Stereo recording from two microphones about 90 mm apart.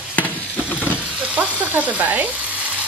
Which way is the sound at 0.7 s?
20° left (ahead or behind).